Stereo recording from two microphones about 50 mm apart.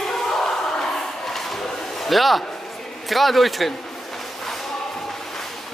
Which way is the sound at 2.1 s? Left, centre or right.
Centre.